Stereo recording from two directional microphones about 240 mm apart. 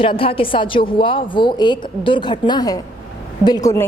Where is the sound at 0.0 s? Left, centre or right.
Left.